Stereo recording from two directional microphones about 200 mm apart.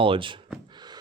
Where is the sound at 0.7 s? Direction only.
20° right (ahead or behind).